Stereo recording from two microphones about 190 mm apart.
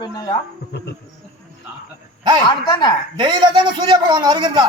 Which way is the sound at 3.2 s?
25° right (ahead or behind).